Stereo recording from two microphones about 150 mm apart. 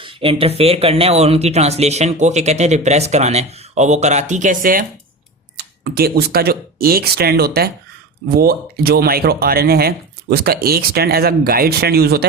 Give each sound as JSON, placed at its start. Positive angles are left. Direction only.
{"t": 0.0, "sound": "speech", "side_deg": -35}
{"t": 5.5, "sound": "speech", "side_deg": -90}